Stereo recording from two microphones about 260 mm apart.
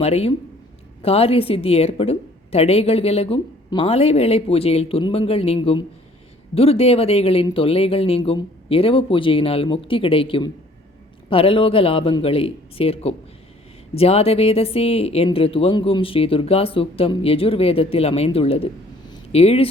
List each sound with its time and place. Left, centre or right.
0.0 s a woman's voice: left